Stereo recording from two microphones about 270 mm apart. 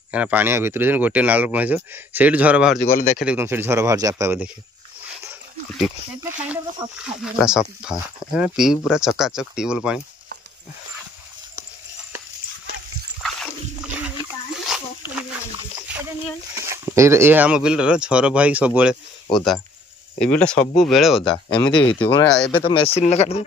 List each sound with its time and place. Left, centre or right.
0.1 s speech: centre
2.8 s speech: left
3.2 s speech: centre
5.2 s a sound: centre
6.4 s speech: centre
13.9 s a sound: centre
16.5 s speech: centre
21.2 s speech: centre